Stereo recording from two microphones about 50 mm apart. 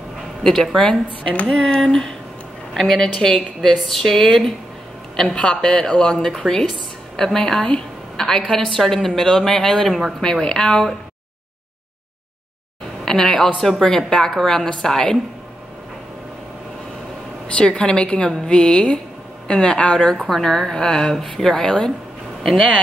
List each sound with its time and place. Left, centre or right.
0.4 s a woman's voice: centre
1.3 s a woman's voice: left; by 10.1 s centre
10.2 s a woman's voice: centre
13.0 s a woman's voice: centre
17.5 s a woman's voice: left
20.2 s a woman's voice: centre